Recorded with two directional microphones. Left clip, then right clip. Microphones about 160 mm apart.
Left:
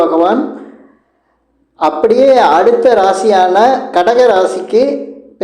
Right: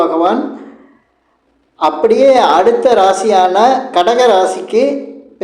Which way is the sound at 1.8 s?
25° left (ahead or behind).